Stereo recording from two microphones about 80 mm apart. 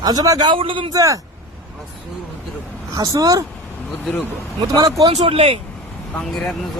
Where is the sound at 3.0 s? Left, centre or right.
Right.